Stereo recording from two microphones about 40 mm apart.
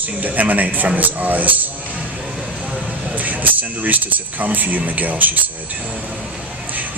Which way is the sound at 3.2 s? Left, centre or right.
Right.